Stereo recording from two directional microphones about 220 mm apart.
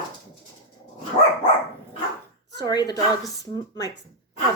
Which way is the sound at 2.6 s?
15° left (ahead or behind).